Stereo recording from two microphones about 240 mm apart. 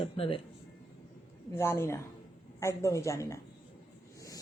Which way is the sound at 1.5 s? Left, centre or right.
Centre.